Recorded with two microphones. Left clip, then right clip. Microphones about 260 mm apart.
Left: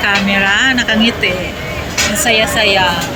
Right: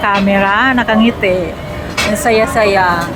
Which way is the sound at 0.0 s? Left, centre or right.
Centre.